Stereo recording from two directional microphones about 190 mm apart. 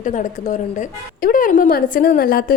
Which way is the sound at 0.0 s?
40° left (ahead or behind).